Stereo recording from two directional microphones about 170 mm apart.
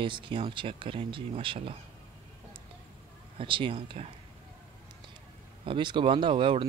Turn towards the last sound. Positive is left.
turn(degrees=-30)  # may be behind; listen again after turning